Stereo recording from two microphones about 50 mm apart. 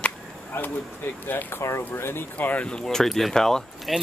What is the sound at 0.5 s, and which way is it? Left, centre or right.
Speech, left.